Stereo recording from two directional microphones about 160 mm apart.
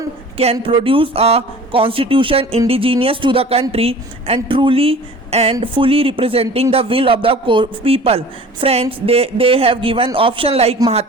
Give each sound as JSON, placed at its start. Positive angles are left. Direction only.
{"t": 0.5, "sound": "a man's voice", "side_deg": -35}